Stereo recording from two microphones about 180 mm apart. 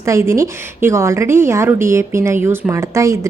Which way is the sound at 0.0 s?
15° right (ahead or behind).